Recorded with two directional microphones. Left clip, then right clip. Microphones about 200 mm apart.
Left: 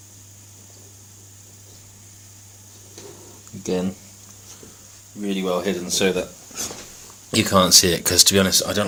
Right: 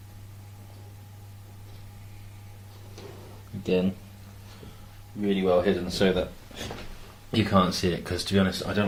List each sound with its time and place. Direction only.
3.6 s speech: 35° left (ahead or behind)
5.2 s speech: 35° left (ahead or behind)
7.3 s speech: 55° left (ahead or behind)